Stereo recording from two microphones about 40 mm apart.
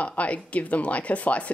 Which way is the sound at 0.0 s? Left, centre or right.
Left.